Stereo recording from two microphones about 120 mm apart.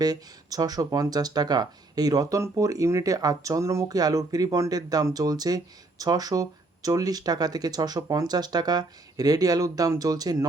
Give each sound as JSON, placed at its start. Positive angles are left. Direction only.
{"t": 0.0, "sound": "speech", "side_deg": -35}